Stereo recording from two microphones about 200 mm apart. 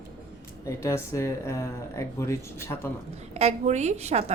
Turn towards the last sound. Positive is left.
turn(degrees=-30)  # may be behind; listen again after turning